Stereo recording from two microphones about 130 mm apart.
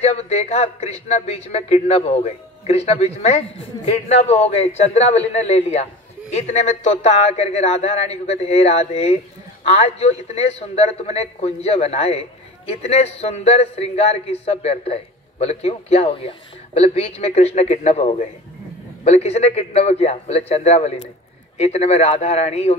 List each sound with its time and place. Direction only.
0.0 s a man's voice: 55° left (ahead or behind)